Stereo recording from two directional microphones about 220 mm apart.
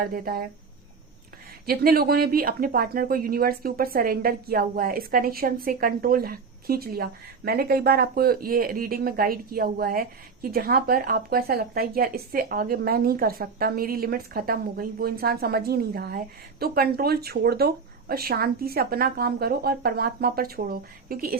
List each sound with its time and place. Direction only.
0.0 s speech: 40° right (ahead or behind)
1.6 s speech: 45° right (ahead or behind)